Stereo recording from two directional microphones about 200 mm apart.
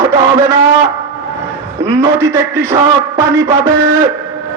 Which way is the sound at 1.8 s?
15° right (ahead or behind).